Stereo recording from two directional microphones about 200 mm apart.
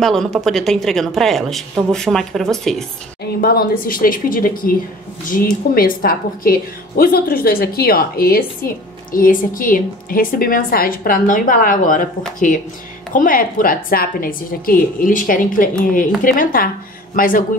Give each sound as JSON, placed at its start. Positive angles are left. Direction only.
{"t": 0.0, "sound": "a woman's voice", "side_deg": 0}
{"t": 3.3, "sound": "a woman's voice", "side_deg": 50}
{"t": 13.1, "sound": "a woman's voice", "side_deg": 45}